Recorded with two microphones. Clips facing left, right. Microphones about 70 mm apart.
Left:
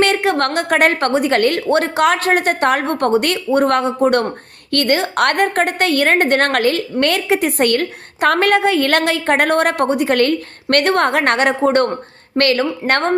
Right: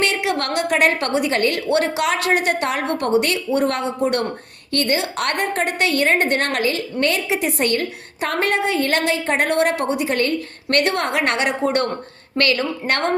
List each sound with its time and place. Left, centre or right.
0.0 s a woman's voice: left